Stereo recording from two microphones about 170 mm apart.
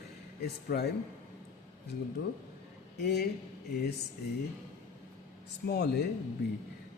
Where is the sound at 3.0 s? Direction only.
75° left (ahead or behind).